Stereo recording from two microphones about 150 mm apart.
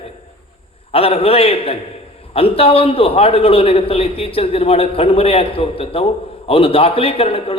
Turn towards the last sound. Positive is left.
turn(degrees=40)  # may be behind; listen again after turning